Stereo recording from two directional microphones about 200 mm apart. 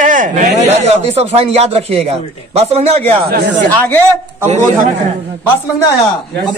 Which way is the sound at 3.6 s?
10° left (ahead or behind).